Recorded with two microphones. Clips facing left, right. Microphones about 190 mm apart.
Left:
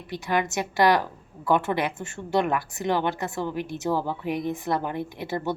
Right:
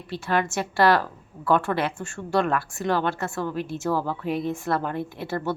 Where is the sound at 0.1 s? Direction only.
15° left (ahead or behind).